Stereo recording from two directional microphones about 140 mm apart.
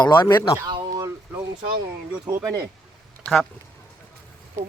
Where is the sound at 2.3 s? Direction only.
15° right (ahead or behind).